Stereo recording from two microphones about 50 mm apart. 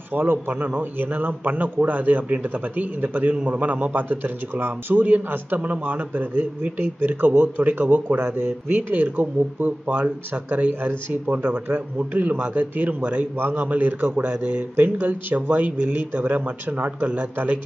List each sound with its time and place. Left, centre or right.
0.1 s a man's voice: right
8.2 s a man's voice: right
10.7 s a man's voice: right